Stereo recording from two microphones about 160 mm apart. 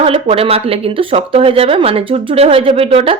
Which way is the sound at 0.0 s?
35° right (ahead or behind).